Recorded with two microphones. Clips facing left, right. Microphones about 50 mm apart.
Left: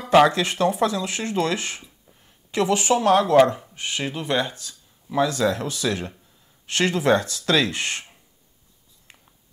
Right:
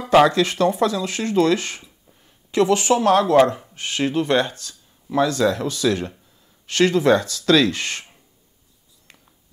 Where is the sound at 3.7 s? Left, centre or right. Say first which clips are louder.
Right 1 dB; left.